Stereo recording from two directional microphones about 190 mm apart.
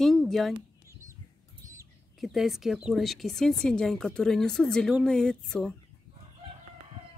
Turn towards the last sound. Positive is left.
turn(degrees=5)  # may be behind; listen again after turning